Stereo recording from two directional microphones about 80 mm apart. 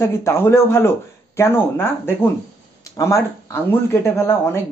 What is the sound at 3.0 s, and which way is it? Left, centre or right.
Speech, left.